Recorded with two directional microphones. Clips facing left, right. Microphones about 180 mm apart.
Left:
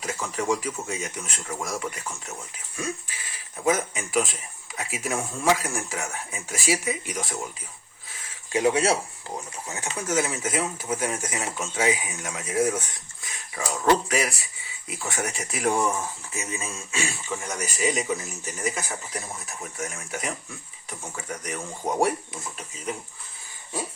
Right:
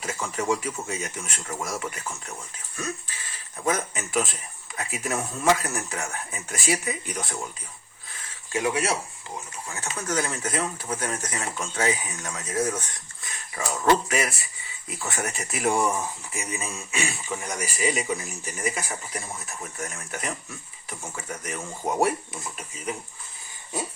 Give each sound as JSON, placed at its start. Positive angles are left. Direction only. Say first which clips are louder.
{"t": 0.0, "sound": "speech", "louder": "even", "side_deg": 0}
{"t": 2.7, "sound": "speech", "louder": "left 1 dB", "side_deg": 10}
{"t": 8.5, "sound": "speech", "louder": "left 4 dB", "side_deg": 25}
{"t": 10.1, "sound": "speech", "louder": "left 2 dB", "side_deg": 5}
{"t": 13.2, "sound": "speech", "louder": "even", "side_deg": 0}
{"t": 16.9, "sound": "speech", "louder": "even", "side_deg": -15}